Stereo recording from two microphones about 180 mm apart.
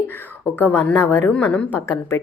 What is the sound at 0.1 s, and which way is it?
A woman's voice, 10° left (ahead or behind).